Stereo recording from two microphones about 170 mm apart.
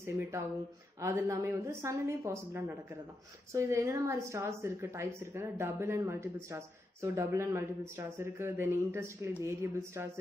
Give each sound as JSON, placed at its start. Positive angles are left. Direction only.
{"t": 1.0, "sound": "a woman's voice", "side_deg": -15}